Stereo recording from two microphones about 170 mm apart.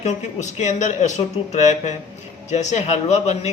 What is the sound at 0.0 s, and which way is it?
Speech, 45° left (ahead or behind).